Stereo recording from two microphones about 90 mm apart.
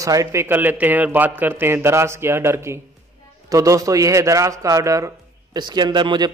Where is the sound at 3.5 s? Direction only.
40° right (ahead or behind).